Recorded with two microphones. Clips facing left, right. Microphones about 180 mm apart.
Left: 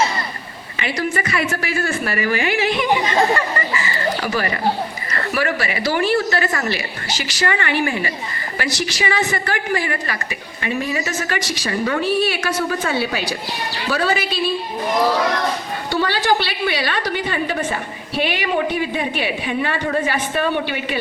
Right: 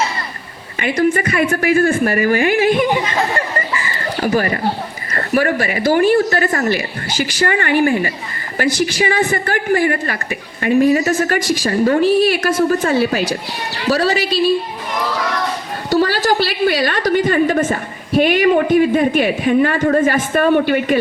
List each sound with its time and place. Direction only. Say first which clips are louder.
0.8 s a woman's voice: right 7 dB; 50° right (ahead or behind)
4.2 s a woman's voice: right 5 dB; 45° right (ahead or behind)
15.9 s a woman's voice: right 4 dB; 40° right (ahead or behind)